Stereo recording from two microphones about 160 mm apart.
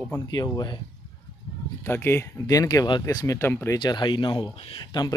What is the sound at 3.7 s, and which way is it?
Speech, 30° left (ahead or behind).